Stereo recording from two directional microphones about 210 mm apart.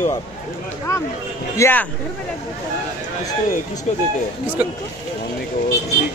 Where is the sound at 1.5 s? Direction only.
10° left (ahead or behind).